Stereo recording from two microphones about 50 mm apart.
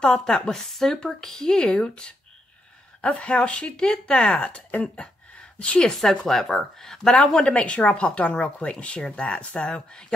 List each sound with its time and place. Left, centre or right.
0.0 s speech: centre
5.9 s speech: centre
7.4 s speech: left